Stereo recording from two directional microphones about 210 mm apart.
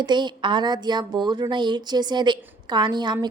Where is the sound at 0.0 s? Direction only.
20° right (ahead or behind).